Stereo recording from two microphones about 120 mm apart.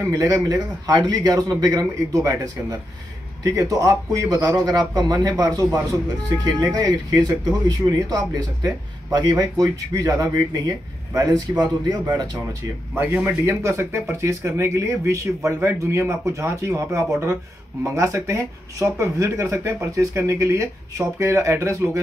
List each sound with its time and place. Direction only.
0.1 s speech: 25° right (ahead or behind)
12.9 s speech: 15° right (ahead or behind)